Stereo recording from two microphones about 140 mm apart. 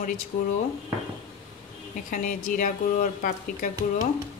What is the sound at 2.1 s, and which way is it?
Speech, 75° left (ahead or behind).